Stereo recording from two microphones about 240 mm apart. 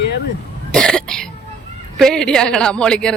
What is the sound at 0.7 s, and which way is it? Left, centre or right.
Cough, centre.